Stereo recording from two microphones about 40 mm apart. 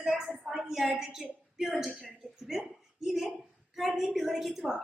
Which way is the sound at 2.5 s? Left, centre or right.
Centre.